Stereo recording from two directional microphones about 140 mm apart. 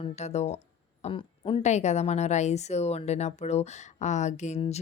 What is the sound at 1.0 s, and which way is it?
A woman's voice, 40° left (ahead or behind).